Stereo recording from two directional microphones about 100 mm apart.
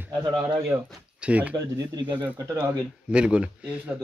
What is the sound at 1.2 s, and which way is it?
Speech, 15° right (ahead or behind).